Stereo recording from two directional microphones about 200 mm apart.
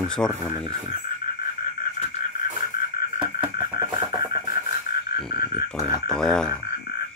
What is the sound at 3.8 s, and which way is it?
Music, 20° right (ahead or behind).